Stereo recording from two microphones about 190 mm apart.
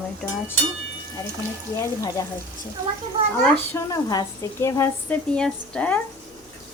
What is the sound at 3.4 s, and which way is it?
A woman's voice, 15° left (ahead or behind).